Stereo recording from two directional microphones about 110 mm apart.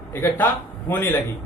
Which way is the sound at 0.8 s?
20° left (ahead or behind).